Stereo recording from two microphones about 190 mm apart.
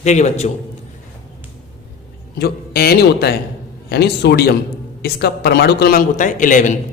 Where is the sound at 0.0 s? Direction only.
35° left (ahead or behind).